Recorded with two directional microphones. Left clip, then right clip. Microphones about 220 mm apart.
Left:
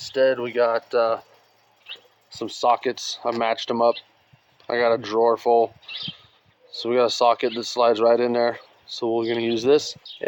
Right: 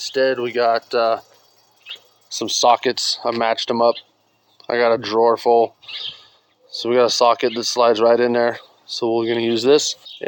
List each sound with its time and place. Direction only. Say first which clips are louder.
0.0 s speech: right 2 dB; 35° right (ahead or behind)
2.3 s speech: right 6 dB; 50° right (ahead or behind)